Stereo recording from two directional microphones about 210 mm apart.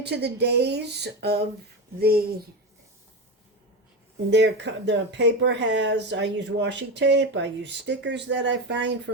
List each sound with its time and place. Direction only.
0.0 s speech: 55° right (ahead or behind)
4.3 s speech: 55° right (ahead or behind)